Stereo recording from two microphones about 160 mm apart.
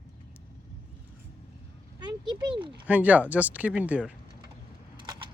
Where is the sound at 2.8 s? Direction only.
10° right (ahead or behind).